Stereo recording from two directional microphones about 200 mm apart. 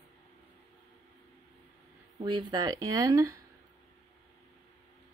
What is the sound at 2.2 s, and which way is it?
A woman's voice, 25° right (ahead or behind).